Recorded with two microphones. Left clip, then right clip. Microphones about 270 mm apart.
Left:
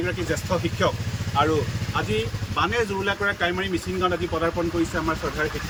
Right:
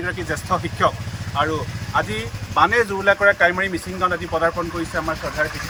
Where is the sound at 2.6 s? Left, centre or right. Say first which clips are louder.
Right 7 dB; centre.